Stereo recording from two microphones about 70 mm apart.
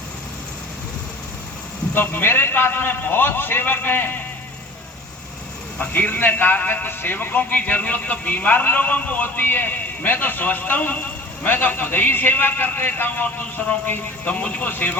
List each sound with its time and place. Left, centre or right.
2.0 s a man's voice: left
5.8 s a man's voice: left